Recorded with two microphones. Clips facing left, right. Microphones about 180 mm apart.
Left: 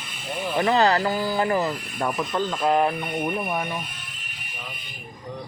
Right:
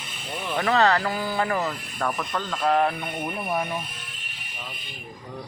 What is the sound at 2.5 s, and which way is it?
Speech, 5° left (ahead or behind).